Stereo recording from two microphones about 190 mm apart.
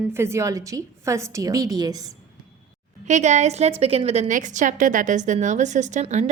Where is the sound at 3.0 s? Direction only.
40° right (ahead or behind).